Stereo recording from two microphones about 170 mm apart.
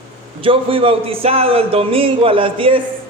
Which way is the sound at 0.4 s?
30° right (ahead or behind).